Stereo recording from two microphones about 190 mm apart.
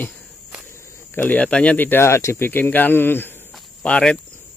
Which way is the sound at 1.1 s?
10° left (ahead or behind).